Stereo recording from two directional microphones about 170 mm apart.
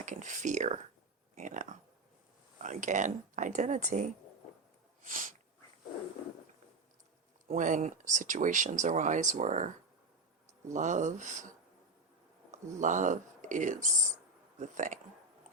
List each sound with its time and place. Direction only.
0.0 s speech: 45° right (ahead or behind)
7.4 s speech: 50° right (ahead or behind)
10.7 s speech: 45° right (ahead or behind)